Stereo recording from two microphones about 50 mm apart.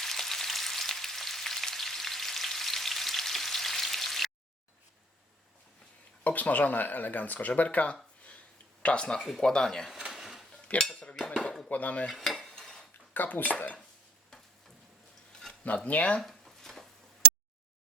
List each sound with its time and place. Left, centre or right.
0.0 s frying: centre
6.2 s speech: left; by 9.9 s centre
10.1 s a sound: centre
10.7 s speech: left
12.1 s stir: centre
13.1 s speech: left
15.3 s a sound: centre
15.6 s speech: left
16.2 s a sound: centre